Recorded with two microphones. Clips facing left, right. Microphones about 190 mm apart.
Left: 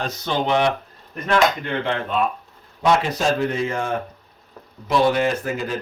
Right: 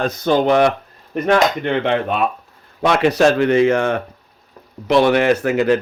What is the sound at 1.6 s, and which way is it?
Speech, 70° right (ahead or behind).